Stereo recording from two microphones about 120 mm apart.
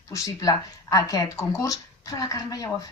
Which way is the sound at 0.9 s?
30° left (ahead or behind).